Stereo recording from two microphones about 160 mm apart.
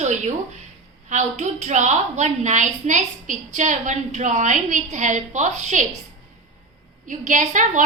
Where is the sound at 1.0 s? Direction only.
45° right (ahead or behind).